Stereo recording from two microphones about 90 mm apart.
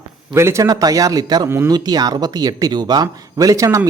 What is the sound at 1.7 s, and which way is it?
Speech, 45° right (ahead or behind).